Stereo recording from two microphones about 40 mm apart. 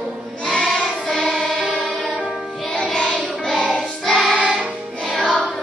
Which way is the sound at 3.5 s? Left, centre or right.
Left.